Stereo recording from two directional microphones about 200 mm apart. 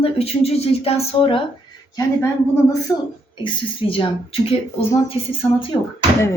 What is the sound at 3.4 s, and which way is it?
Speech, 25° left (ahead or behind).